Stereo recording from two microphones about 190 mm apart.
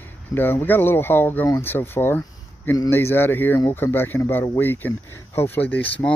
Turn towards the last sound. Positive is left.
turn(degrees=10)  # may be behind; listen again after turning